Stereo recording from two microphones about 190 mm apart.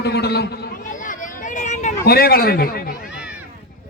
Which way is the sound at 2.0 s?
55° left (ahead or behind).